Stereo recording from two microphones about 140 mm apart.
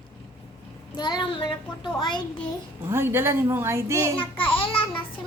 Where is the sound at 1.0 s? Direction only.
35° left (ahead or behind).